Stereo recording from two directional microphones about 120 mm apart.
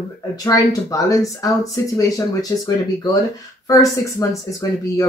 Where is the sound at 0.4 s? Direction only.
30° left (ahead or behind).